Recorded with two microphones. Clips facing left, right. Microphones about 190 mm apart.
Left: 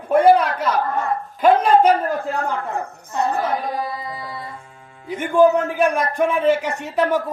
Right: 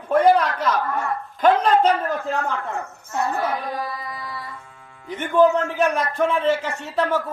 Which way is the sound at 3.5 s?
25° left (ahead or behind).